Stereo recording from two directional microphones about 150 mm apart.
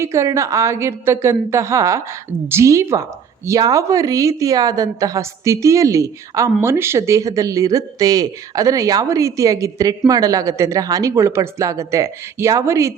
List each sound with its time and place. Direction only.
0.0 s a woman's voice: 20° right (ahead or behind)